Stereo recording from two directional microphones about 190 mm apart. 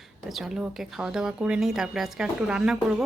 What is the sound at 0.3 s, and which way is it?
Speech, centre (ahead or behind).